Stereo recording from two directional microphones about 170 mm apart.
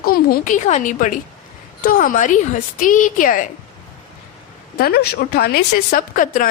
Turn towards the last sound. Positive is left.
turn(degrees=55)  # may be behind; listen again after turning